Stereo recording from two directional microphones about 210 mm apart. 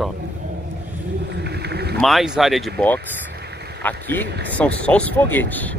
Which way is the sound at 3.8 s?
10° left (ahead or behind).